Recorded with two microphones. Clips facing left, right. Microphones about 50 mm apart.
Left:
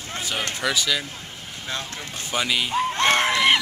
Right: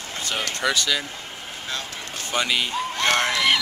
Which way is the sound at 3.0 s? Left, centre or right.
Centre.